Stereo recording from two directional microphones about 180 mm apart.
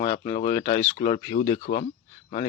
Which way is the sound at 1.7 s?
50° left (ahead or behind).